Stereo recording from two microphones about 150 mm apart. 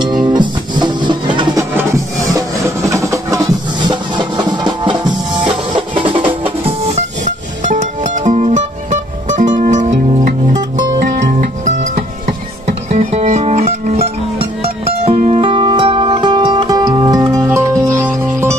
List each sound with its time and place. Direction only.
0.0 s music: 30° right (ahead or behind)
2.3 s music: 20° right (ahead or behind); by 14.1 s 50° right (ahead or behind)
15.1 s music: 50° right (ahead or behind)
15.4 s music: 35° right (ahead or behind); by 18.6 s 15° right (ahead or behind)